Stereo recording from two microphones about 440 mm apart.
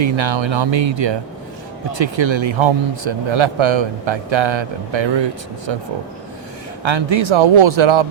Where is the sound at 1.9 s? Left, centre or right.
Right.